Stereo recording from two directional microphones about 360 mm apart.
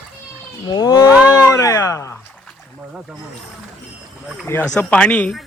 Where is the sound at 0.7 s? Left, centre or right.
Centre.